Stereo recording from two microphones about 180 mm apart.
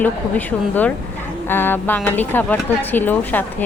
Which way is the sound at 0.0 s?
10° left (ahead or behind).